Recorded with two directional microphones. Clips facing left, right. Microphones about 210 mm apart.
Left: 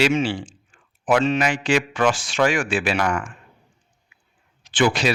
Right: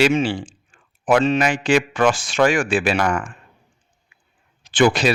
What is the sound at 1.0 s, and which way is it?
A man's voice, 45° right (ahead or behind).